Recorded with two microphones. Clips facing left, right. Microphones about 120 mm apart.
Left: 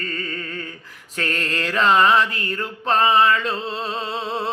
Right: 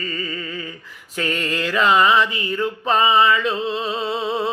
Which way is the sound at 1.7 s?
Centre (ahead or behind).